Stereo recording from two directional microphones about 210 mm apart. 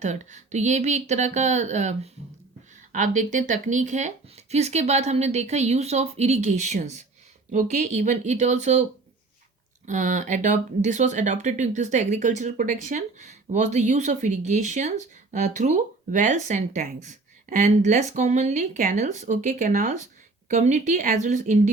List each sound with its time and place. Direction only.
0.0 s speech: 35° right (ahead or behind)